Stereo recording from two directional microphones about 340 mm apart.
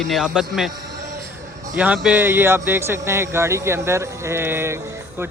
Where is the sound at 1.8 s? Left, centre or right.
Centre.